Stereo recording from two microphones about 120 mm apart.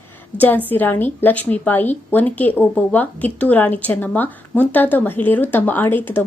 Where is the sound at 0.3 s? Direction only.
15° left (ahead or behind).